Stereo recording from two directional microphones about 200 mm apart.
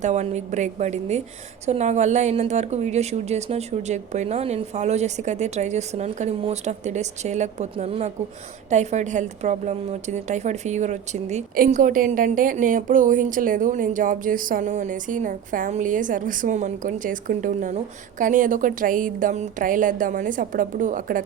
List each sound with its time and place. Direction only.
0.0 s a woman's voice: 35° right (ahead or behind)